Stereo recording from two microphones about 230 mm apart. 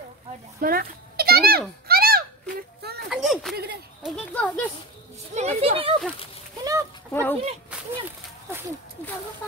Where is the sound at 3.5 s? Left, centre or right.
Right.